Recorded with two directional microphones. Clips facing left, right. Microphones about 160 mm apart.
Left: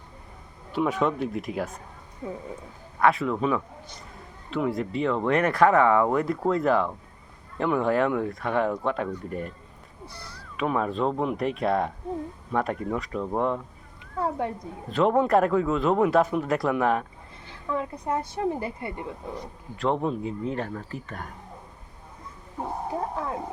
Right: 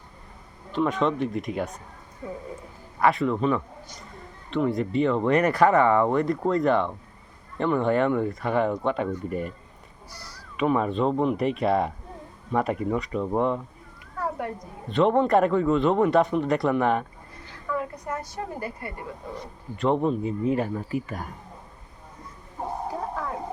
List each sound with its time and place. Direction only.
0.7 s speech: 10° left (ahead or behind)
3.0 s speech: centre (ahead or behind)
10.6 s speech: centre (ahead or behind)
14.2 s speech: 25° left (ahead or behind)
14.8 s speech: centre (ahead or behind)
17.7 s a woman's voice: 25° left (ahead or behind)
19.7 s speech: centre (ahead or behind)